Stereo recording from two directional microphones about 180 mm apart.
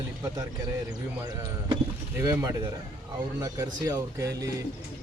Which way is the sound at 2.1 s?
15° right (ahead or behind).